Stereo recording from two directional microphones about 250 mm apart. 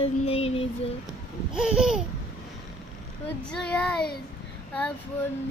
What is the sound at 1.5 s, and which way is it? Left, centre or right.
Speech, centre.